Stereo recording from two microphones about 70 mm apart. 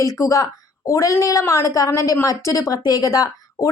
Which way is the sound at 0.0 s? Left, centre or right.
Left.